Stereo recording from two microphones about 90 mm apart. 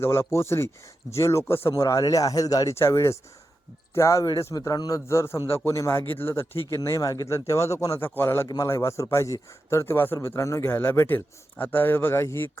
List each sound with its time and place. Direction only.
0.0 s a man's voice: 30° left (ahead or behind)
1.7 s a man's voice: 40° left (ahead or behind)
8.0 s a man's voice: 25° left (ahead or behind)
8.4 s a man's voice: 35° left (ahead or behind)